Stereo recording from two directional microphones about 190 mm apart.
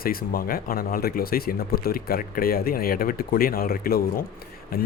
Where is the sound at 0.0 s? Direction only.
50° left (ahead or behind).